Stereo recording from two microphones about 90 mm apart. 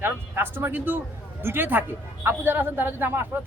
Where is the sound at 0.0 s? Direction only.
25° right (ahead or behind).